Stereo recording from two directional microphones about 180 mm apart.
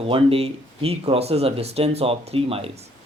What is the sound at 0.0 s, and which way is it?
Speech, 30° right (ahead or behind).